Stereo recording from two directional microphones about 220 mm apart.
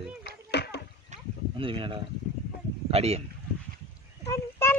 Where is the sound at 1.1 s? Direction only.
25° right (ahead or behind).